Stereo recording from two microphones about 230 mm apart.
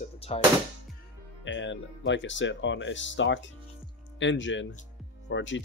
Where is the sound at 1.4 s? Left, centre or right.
Left.